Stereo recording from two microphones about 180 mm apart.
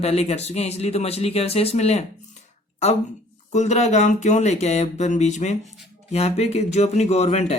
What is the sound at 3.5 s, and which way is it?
A man's voice, 40° left (ahead or behind).